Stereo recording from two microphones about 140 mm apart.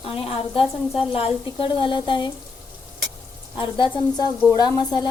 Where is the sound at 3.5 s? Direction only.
30° left (ahead or behind).